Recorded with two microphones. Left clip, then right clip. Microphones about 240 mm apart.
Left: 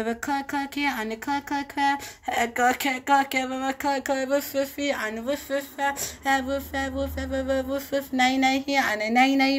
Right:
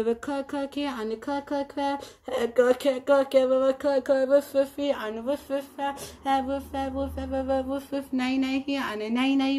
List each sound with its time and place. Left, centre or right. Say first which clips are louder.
0.0 s speech: even; centre